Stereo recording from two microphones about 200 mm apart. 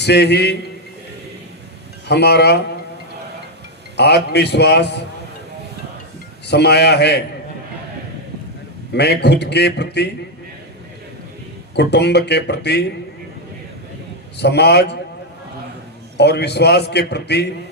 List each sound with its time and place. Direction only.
0.0 s a man's voice: 55° left (ahead or behind)
2.0 s a man's voice: 55° left (ahead or behind)
3.9 s a man's voice: 55° left (ahead or behind)
6.5 s a man's voice: 55° left (ahead or behind)
8.9 s a man's voice: 55° left (ahead or behind)
11.7 s a man's voice: 55° left (ahead or behind)
14.3 s a man's voice: 55° left (ahead or behind)
16.1 s a man's voice: 55° left (ahead or behind)